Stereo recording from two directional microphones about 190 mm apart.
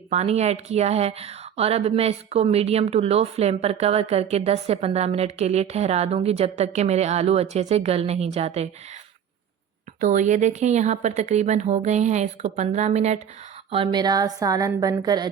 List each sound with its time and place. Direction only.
0.1 s a woman's voice: 35° right (ahead or behind)
10.0 s a woman's voice: 40° right (ahead or behind); by 15.3 s 20° right (ahead or behind)